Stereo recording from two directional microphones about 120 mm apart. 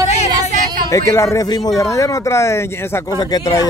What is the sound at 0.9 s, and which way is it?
Speech, 25° left (ahead or behind).